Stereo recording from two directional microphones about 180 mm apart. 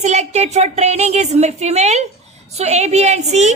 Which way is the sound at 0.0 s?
40° right (ahead or behind).